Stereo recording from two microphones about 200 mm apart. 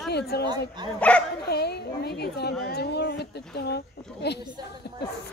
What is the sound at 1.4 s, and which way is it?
A woman's voice, 55° left (ahead or behind).